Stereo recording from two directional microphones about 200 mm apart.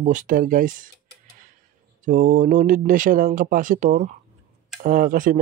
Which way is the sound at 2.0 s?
40° right (ahead or behind).